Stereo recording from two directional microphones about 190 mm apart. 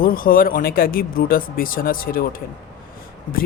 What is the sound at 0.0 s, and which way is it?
Speech, 50° left (ahead or behind).